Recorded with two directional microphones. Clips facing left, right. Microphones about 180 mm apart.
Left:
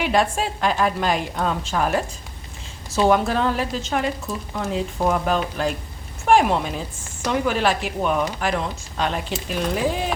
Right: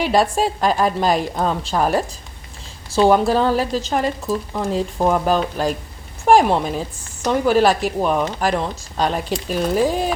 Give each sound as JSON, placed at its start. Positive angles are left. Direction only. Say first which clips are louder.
{"t": 0.0, "sound": "speech", "louder": "right 4 dB", "side_deg": -35}